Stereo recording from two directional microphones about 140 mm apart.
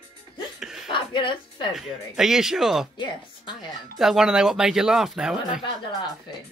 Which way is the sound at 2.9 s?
30° left (ahead or behind).